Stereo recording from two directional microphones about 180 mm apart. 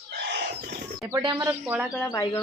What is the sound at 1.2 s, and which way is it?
Speech, 20° right (ahead or behind).